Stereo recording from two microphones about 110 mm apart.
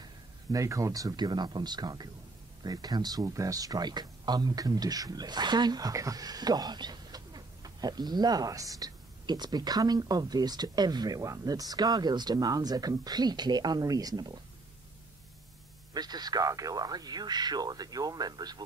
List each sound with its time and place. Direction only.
0.0 s speech: 30° right (ahead or behind)
15.9 s speech: 40° right (ahead or behind)